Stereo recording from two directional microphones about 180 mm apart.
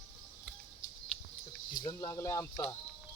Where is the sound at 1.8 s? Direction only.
15° left (ahead or behind).